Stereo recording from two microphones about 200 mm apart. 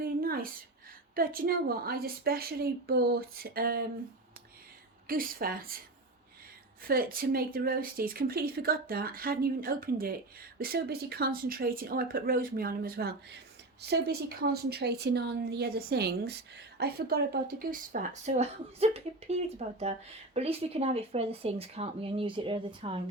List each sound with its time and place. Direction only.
0.0 s a sound: 45° right (ahead or behind)
1.1 s a woman's voice: 45° right (ahead or behind)
5.0 s a woman's voice: 45° right (ahead or behind)
6.8 s a woman's voice: 45° right (ahead or behind); by 23.0 s 25° right (ahead or behind)